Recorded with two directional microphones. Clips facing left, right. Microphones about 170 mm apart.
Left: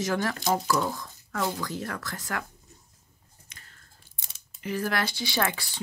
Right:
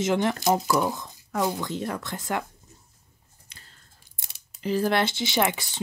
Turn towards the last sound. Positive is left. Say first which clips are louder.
# right 4 dB
turn(degrees=-20)  # may be behind; listen again after turning